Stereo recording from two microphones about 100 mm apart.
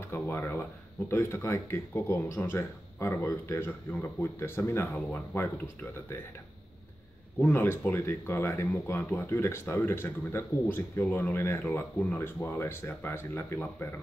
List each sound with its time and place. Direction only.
0.1 s speech: 20° left (ahead or behind)
7.4 s speech: 20° left (ahead or behind)